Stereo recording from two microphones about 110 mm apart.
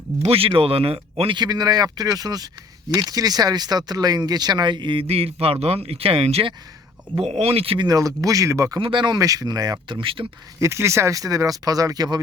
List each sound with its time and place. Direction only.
0.2 s speech: 60° right (ahead or behind)
1.4 s speech: 35° right (ahead or behind); by 7.9 s 60° right (ahead or behind)
7.9 s speech: 30° right (ahead or behind)
8.8 s speech: 45° right (ahead or behind)
9.9 s speech: 55° right (ahead or behind)
10.6 s speech: 25° right (ahead or behind)